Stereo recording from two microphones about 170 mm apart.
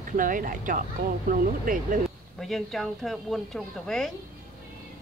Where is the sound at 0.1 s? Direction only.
50° right (ahead or behind).